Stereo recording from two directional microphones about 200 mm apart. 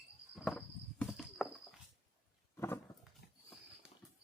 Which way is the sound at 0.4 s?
Centre (ahead or behind).